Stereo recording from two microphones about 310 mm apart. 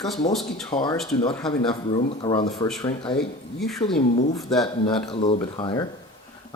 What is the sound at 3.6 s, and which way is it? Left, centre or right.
Speech, centre.